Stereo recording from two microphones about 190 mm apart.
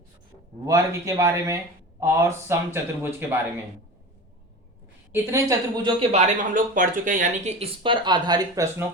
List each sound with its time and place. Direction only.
0.6 s a man's voice: 15° right (ahead or behind)
5.1 s speech: 15° right (ahead or behind)